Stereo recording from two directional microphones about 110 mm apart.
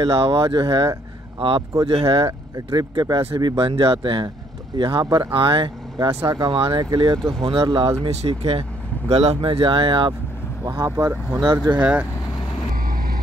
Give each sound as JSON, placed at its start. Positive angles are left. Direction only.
{"t": 0.0, "sound": "speech", "side_deg": -50}
{"t": 2.2, "sound": "speech", "side_deg": -35}
{"t": 6.2, "sound": "speech", "side_deg": -35}
{"t": 6.5, "sound": "speech", "side_deg": -50}
{"t": 6.8, "sound": "speech", "side_deg": -40}
{"t": 7.2, "sound": "speech", "side_deg": 5}
{"t": 7.4, "sound": "speech", "side_deg": -50}
{"t": 7.9, "sound": "speech", "side_deg": -70}
{"t": 9.1, "sound": "speech", "side_deg": -70}
{"t": 10.6, "sound": "speech", "side_deg": -35}
{"t": 11.8, "sound": "speech", "side_deg": -10}